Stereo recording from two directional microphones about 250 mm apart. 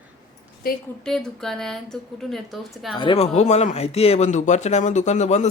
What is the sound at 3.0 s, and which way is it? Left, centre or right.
A man's voice, left.